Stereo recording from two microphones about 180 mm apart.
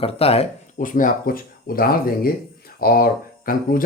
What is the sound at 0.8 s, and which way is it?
Speech, 45° left (ahead or behind).